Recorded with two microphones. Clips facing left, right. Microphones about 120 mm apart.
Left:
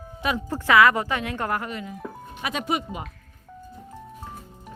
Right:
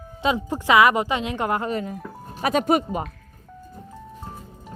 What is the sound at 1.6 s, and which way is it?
Speech, 40° right (ahead or behind).